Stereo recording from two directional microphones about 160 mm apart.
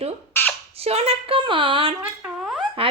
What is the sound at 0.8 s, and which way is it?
A woman's voice, 40° right (ahead or behind).